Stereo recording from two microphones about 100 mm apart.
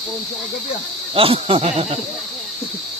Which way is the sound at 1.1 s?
70° right (ahead or behind).